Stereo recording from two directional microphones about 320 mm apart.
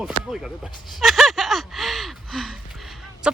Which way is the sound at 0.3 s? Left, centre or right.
Centre.